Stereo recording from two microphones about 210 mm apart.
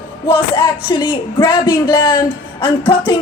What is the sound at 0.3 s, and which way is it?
A woman's voice, 25° left (ahead or behind).